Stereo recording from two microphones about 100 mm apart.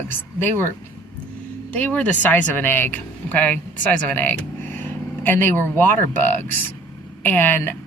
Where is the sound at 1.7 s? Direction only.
15° left (ahead or behind).